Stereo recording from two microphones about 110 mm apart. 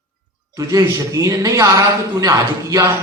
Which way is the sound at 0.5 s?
30° right (ahead or behind).